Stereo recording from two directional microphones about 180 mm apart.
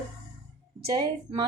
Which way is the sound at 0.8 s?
20° right (ahead or behind).